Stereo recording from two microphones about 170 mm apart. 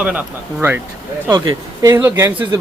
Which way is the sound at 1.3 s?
25° right (ahead or behind).